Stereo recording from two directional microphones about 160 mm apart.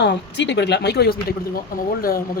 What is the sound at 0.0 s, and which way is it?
Speech, 90° left.